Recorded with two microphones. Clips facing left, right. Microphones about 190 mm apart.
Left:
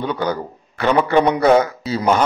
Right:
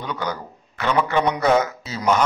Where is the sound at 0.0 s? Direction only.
30° left (ahead or behind).